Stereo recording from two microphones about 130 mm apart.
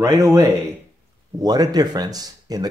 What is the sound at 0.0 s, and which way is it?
Speech, 25° right (ahead or behind).